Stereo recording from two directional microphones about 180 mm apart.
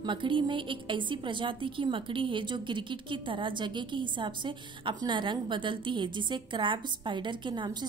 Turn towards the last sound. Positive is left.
turn(degrees=-25)  # may be behind; listen again after turning